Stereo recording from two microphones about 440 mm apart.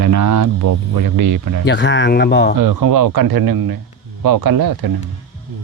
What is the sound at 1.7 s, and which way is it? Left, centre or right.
Speech, left.